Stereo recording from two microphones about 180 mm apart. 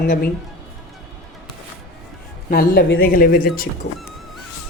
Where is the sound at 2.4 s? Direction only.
60° left (ahead or behind).